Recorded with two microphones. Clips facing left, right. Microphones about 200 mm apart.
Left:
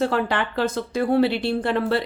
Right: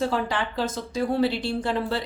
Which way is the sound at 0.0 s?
60° left (ahead or behind).